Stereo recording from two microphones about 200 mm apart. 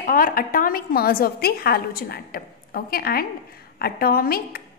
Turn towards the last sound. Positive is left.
turn(degrees=50)  # may be behind; listen again after turning